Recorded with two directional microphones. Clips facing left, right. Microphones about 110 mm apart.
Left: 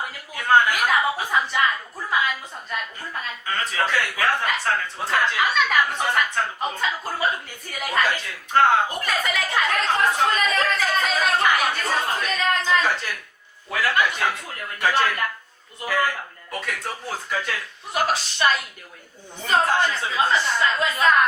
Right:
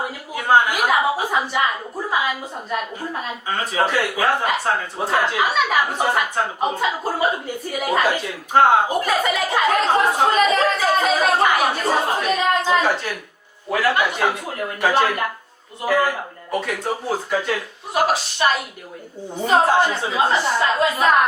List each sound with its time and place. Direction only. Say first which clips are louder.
0.3 s chuckle: right 2 dB; 20° right (ahead or behind)
1.2 s a sound: right 2 dB; 20° right (ahead or behind)
3.1 s speech: right 4 dB; 20° right (ahead or behind)
5.4 s speech: right 2 dB; 10° right (ahead or behind)
5.7 s a woman's voice: right 3 dB; 35° right (ahead or behind)
6.6 s a sound: right 5 dB; 15° right (ahead or behind)
7.8 s a woman's voice: right 4 dB; 20° right (ahead or behind)
9.9 s a sound: right 4 dB; 30° right (ahead or behind)
11.8 s chatter: right 5 dB; 30° right (ahead or behind)
13.7 s speech: right 3 dB; 30° right (ahead or behind)